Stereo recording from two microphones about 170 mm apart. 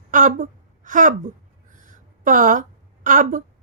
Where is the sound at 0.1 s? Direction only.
50° right (ahead or behind).